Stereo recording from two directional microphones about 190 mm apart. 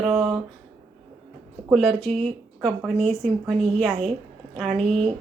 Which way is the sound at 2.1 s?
30° right (ahead or behind).